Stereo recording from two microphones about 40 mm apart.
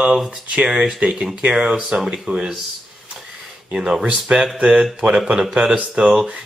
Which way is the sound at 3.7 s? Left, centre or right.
Centre.